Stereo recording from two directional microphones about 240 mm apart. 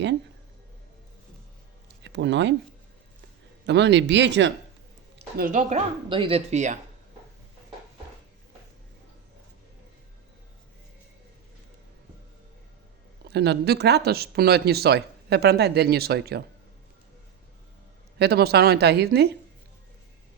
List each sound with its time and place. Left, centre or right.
2.0 s speech: right
3.7 s speech: right
5.4 s speech: right
13.3 s speech: right
18.2 s speech: right